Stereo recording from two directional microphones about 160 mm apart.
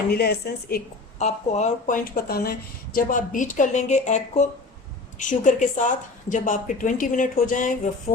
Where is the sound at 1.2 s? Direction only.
45° left (ahead or behind).